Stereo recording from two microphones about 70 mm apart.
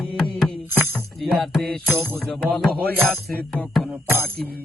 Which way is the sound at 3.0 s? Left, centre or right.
Left.